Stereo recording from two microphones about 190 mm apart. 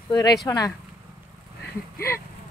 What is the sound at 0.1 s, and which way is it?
Speech, 20° left (ahead or behind).